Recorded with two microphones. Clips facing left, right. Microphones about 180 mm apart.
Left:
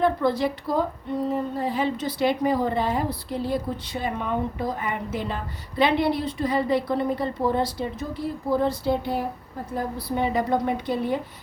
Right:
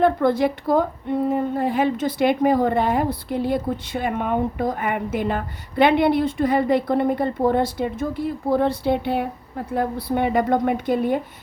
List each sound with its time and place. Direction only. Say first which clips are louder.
0.0 s a woman's voice: right 4 dB; 55° right (ahead or behind)